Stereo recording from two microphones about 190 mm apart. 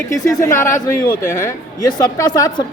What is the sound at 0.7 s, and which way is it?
Speech, 50° left (ahead or behind).